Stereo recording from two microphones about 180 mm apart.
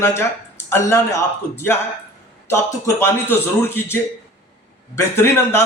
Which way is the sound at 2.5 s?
15° left (ahead or behind).